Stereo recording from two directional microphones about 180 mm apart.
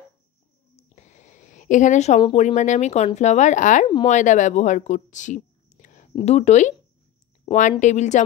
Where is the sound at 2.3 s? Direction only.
40° left (ahead or behind).